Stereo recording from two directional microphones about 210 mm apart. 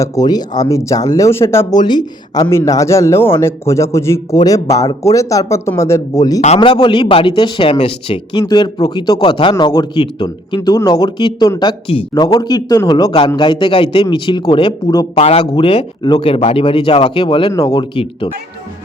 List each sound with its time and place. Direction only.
0.0 s speech: 20° left (ahead or behind)
6.4 s speech: 30° left (ahead or behind)